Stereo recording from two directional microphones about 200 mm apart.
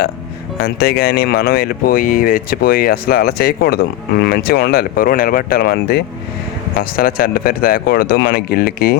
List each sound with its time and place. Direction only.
0.6 s speech: 50° left (ahead or behind)